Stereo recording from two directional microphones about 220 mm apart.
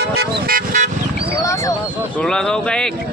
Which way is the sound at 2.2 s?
5° left (ahead or behind).